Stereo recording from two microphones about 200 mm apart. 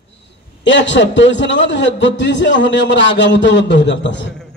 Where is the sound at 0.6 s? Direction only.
65° left (ahead or behind).